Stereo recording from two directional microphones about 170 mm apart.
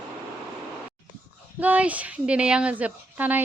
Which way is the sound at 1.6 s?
10° right (ahead or behind).